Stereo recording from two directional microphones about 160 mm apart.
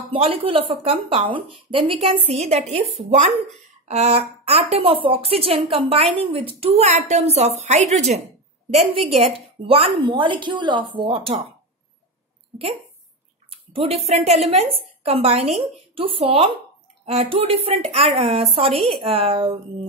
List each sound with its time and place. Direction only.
0.1 s a woman's voice: 35° right (ahead or behind)
13.5 s a woman's voice: 40° right (ahead or behind)